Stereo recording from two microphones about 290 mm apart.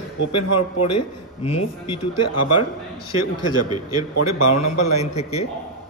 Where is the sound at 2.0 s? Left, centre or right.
Left.